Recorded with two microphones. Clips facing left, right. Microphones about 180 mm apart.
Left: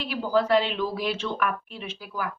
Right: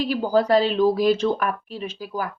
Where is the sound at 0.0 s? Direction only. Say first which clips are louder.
Right 4 dB; 40° right (ahead or behind).